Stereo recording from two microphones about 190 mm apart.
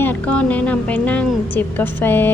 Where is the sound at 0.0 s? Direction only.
10° left (ahead or behind).